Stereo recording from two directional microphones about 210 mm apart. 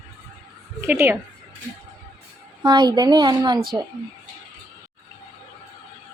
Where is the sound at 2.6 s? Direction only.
20° right (ahead or behind).